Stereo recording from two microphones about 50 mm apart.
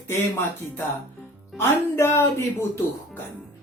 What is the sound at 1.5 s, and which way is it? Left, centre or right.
Speech, left.